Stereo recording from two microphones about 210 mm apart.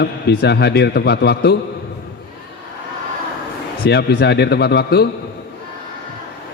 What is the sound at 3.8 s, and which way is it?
Speech, 50° left (ahead or behind).